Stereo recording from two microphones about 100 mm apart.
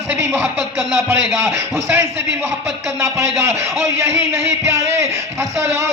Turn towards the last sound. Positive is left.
turn(degrees=-25)  # may be behind; listen again after turning